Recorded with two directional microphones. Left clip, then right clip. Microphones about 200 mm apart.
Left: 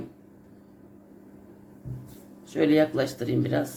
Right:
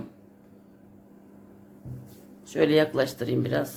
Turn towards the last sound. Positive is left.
turn(degrees=-20)  # may be behind; listen again after turning